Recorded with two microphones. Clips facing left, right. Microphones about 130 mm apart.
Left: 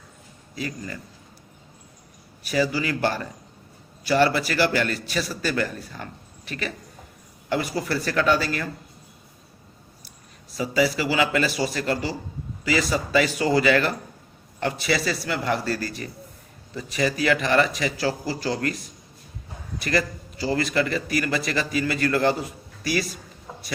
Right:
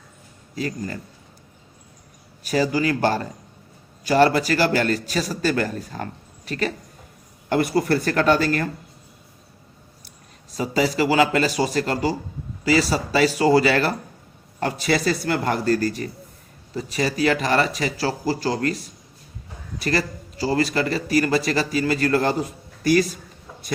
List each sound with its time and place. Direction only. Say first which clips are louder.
0.5 s a man's voice: right 4 dB; 40° right (ahead or behind)
2.4 s a man's voice: right 3 dB; 45° right (ahead or behind)
7.5 s a man's voice: right 6 dB; 60° right (ahead or behind)
10.5 s a man's voice: right 1 dB; 45° right (ahead or behind)
19.8 s a man's voice: right 1 dB; 40° right (ahead or behind)